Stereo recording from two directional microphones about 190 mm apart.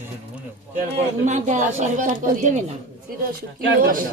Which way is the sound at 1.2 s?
40° right (ahead or behind).